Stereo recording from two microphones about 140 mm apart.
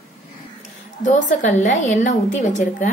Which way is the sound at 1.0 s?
65° left (ahead or behind).